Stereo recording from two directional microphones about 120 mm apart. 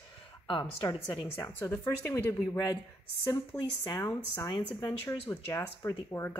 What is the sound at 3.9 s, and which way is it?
A woman's voice, 30° left (ahead or behind).